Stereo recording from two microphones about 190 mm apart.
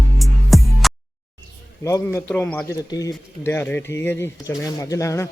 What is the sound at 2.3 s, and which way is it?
Speech, 5° left (ahead or behind).